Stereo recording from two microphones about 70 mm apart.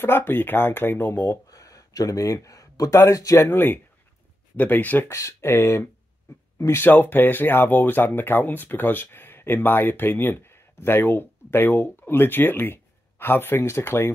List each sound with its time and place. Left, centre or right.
0.0 s speech: left
1.5 s a sound: left
3.0 s speech: left
3.4 s speech: left
5.1 s speech: left
5.5 s speech: left